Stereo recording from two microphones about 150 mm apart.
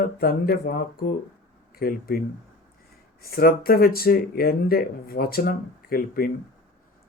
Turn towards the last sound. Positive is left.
turn(degrees=80)